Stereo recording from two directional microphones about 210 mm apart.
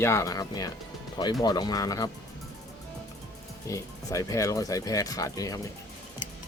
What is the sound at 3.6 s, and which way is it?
Speech, 15° left (ahead or behind).